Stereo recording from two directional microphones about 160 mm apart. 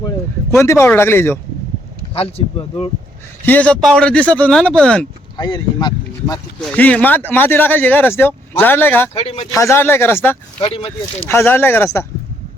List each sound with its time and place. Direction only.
0.5 s speech: 15° left (ahead or behind)
2.1 s speech: 40° left (ahead or behind)
3.4 s speech: 10° left (ahead or behind)
5.4 s speech: 30° left (ahead or behind)
6.6 s speech: 5° left (ahead or behind)
9.1 s speech: 40° left (ahead or behind)
9.5 s speech: 20° left (ahead or behind)
10.6 s speech: 35° left (ahead or behind)
11.2 s speech: 15° left (ahead or behind)